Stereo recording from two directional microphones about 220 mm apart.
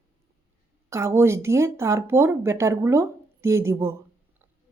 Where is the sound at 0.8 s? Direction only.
15° right (ahead or behind).